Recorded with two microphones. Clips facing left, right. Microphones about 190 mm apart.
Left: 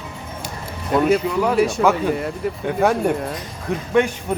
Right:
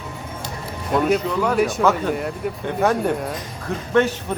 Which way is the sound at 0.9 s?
5° left (ahead or behind).